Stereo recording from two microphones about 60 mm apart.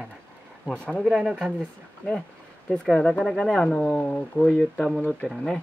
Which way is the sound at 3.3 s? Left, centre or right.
Centre.